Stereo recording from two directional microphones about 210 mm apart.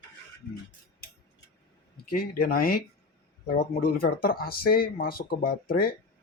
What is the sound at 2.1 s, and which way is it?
Speech, 45° left (ahead or behind).